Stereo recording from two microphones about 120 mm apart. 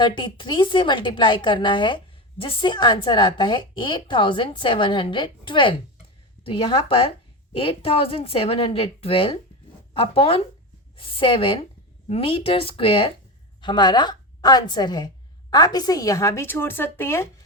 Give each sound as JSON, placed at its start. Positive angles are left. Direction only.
{"t": 0.0, "sound": "a woman's voice", "side_deg": 40}